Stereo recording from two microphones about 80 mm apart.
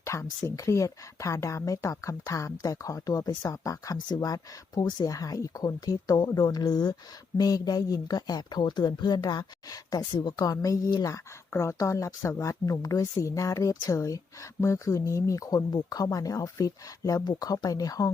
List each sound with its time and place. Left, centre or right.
0.0 s speech: left
11.0 s speech: left
17.2 s speech: left